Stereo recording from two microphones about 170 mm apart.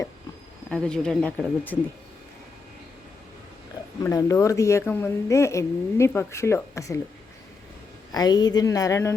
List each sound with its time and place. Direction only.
0.7 s speech: 5° left (ahead or behind)
4.0 s speech: 20° left (ahead or behind)
8.1 s a woman's voice: 25° left (ahead or behind)